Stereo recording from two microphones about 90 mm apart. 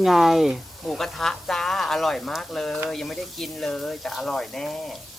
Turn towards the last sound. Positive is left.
turn(degrees=0)  # may be behind; listen again after turning